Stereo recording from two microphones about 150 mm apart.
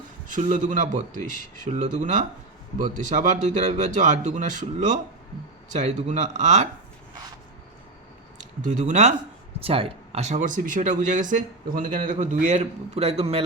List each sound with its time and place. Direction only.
0.3 s a man's voice: 60° right (ahead or behind)
8.4 s speech: 55° right (ahead or behind)
9.6 s speech: 40° right (ahead or behind)